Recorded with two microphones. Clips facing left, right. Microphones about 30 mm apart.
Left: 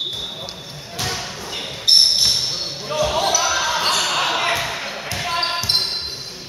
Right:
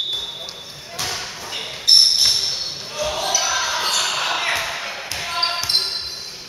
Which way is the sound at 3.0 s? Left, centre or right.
Left.